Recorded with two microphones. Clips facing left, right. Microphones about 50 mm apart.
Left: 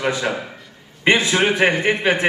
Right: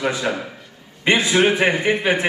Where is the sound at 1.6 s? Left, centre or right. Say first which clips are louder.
Left 1 dB; left.